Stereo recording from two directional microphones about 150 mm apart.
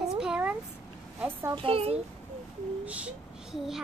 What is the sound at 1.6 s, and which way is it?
Speech, 40° right (ahead or behind).